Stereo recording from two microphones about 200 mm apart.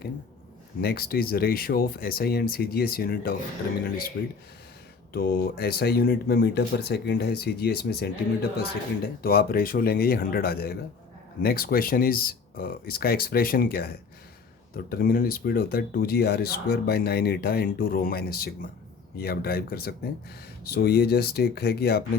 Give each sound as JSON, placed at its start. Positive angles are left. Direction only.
{"t": 0.8, "sound": "speech", "side_deg": 50}
{"t": 5.1, "sound": "speech", "side_deg": 50}